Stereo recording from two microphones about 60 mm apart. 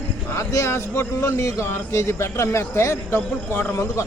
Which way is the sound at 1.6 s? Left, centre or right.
Left.